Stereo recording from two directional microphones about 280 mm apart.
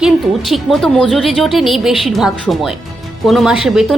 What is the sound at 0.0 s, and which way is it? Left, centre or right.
A woman's voice, centre.